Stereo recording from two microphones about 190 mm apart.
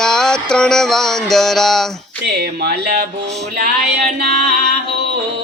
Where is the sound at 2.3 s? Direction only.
60° right (ahead or behind).